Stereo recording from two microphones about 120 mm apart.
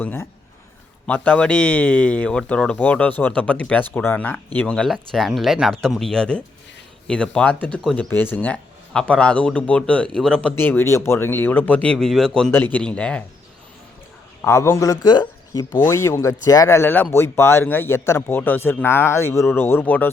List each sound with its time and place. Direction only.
0.0 s a man's voice: 15° left (ahead or behind)
10.5 s speech: 20° left (ahead or behind)
12.5 s speech: 20° left (ahead or behind)
14.4 s a man's voice: 20° left (ahead or behind)
15.8 s speech: 25° left (ahead or behind)